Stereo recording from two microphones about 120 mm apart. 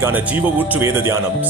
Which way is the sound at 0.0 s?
15° right (ahead or behind).